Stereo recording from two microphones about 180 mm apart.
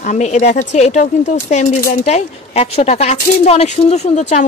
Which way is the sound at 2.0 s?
35° left (ahead or behind).